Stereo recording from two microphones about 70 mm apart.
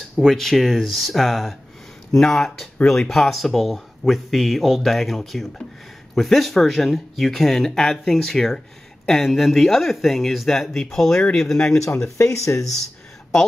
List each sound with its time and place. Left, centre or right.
0.1 s speech: centre
12.2 s speech: left